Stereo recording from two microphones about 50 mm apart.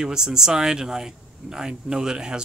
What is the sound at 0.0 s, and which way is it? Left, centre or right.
Speech, centre.